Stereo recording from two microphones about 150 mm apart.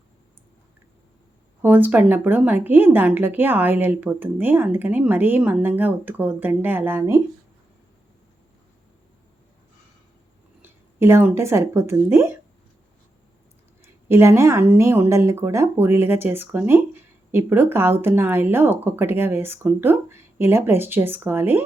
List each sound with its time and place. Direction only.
1.6 s a woman's voice: 10° right (ahead or behind)
10.6 s speech: 15° right (ahead or behind)
13.8 s a woman's voice: 15° right (ahead or behind)